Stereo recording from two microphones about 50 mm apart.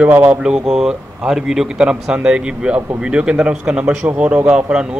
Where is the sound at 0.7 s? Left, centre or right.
Centre.